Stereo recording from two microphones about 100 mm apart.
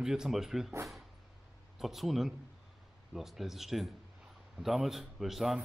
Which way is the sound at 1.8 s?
Centre (ahead or behind).